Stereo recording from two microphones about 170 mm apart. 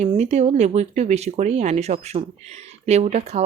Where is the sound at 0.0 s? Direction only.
40° right (ahead or behind).